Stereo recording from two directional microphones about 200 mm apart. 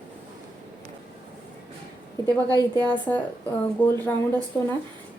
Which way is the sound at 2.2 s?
20° right (ahead or behind).